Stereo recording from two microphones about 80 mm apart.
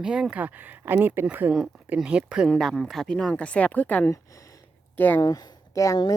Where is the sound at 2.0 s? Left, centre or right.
Centre.